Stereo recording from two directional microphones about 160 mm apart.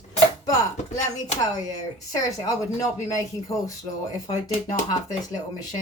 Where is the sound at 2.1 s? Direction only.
20° left (ahead or behind).